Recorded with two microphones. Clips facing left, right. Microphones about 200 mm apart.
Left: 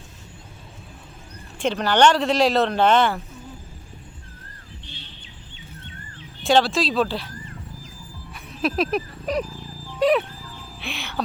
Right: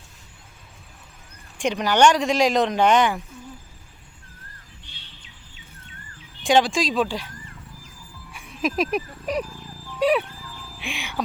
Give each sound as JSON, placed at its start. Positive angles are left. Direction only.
{"t": 1.5, "sound": "speech", "side_deg": -15}
{"t": 6.4, "sound": "speech", "side_deg": -15}
{"t": 8.3, "sound": "music", "side_deg": -10}
{"t": 8.6, "sound": "speech", "side_deg": -10}
{"t": 9.4, "sound": "wild animals", "side_deg": 25}
{"t": 10.0, "sound": "speech", "side_deg": -10}
{"t": 10.4, "sound": "music", "side_deg": 25}
{"t": 10.8, "sound": "speech", "side_deg": -10}